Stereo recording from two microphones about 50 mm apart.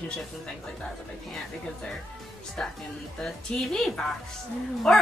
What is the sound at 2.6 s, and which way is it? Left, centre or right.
Speech, left.